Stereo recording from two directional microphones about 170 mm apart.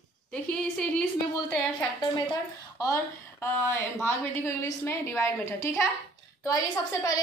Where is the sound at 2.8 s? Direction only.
15° left (ahead or behind).